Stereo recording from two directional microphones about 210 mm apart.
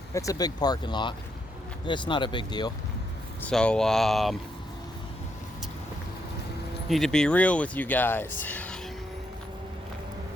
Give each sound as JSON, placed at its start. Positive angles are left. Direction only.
{"t": 0.1, "sound": "speech", "side_deg": 15}
{"t": 3.4, "sound": "speech", "side_deg": 5}
{"t": 6.8, "sound": "speech", "side_deg": 0}